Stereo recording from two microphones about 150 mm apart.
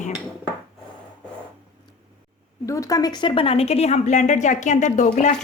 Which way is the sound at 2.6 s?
20° left (ahead or behind).